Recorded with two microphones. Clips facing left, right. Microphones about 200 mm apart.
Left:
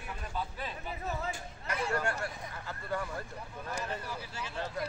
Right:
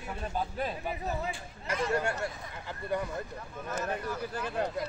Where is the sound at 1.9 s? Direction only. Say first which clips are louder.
Right 3 dB; 25° right (ahead or behind).